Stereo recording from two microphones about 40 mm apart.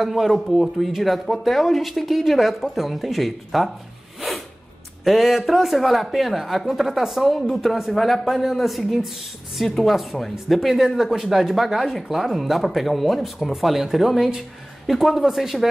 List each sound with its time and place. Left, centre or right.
0.0 s speech: centre
5.0 s speech: centre